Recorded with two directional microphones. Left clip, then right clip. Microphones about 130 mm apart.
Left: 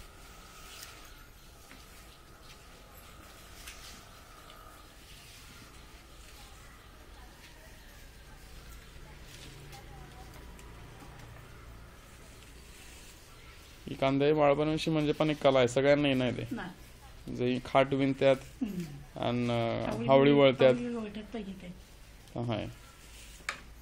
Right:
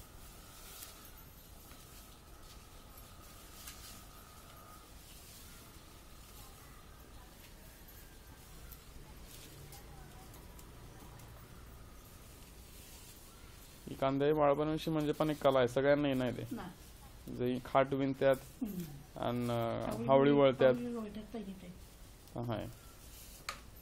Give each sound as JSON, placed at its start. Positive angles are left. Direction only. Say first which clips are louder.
{"t": 13.8, "sound": "speech", "louder": "left 5 dB", "side_deg": 5}
{"t": 18.6, "sound": "speech", "louder": "left 5 dB", "side_deg": -15}
{"t": 19.1, "sound": "speech", "louder": "left 5 dB", "side_deg": 5}
{"t": 20.9, "sound": "a sound", "louder": "left 5 dB", "side_deg": -15}
{"t": 22.3, "sound": "speech", "louder": "left 5 dB", "side_deg": 5}